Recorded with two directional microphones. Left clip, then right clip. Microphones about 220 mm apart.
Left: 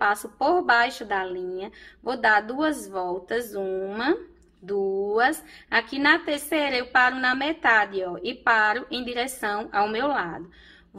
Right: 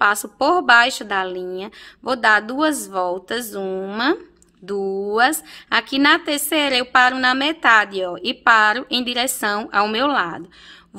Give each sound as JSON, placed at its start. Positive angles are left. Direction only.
{"t": 0.0, "sound": "a woman's voice", "side_deg": -40}